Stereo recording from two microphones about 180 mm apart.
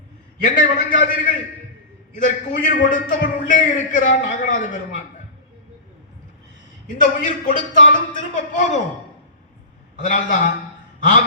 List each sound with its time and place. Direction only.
0.4 s a man's voice: 45° left (ahead or behind)
7.0 s a man's voice: 45° left (ahead or behind)
10.1 s a man's voice: 45° left (ahead or behind)